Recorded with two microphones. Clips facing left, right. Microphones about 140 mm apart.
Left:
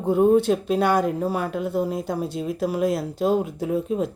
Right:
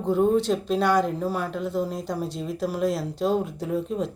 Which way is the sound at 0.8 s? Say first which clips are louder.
Even; 55° left (ahead or behind).